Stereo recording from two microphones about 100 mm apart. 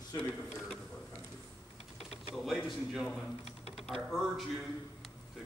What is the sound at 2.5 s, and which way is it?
Speech, centre (ahead or behind).